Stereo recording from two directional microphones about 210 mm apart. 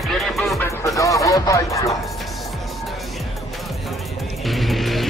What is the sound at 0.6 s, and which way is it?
Music, 15° left (ahead or behind).